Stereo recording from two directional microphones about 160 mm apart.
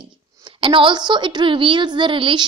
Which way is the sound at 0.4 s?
30° right (ahead or behind).